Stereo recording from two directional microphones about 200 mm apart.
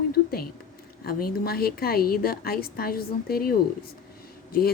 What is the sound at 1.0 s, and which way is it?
A woman's voice, 50° left (ahead or behind).